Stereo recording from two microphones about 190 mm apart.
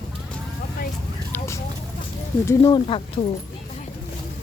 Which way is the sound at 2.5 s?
20° left (ahead or behind).